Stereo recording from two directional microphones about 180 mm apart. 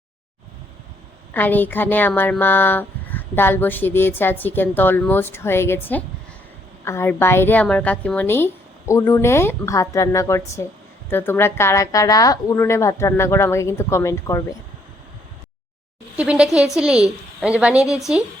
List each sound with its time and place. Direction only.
1.3 s a woman's voice: 10° left (ahead or behind)
16.1 s a woman's voice: 5° right (ahead or behind)